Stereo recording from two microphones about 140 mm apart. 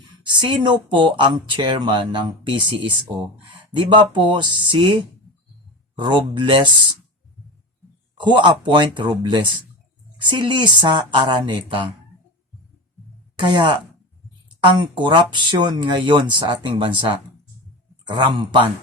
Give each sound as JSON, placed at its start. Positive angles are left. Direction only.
{"t": 0.2, "sound": "speech", "side_deg": -35}
{"t": 6.0, "sound": "speech", "side_deg": -35}
{"t": 8.2, "sound": "speech", "side_deg": -35}
{"t": 13.5, "sound": "speech", "side_deg": -35}
{"t": 14.8, "sound": "speech", "side_deg": -35}